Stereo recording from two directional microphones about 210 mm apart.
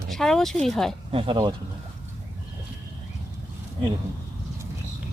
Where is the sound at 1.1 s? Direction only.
25° right (ahead or behind).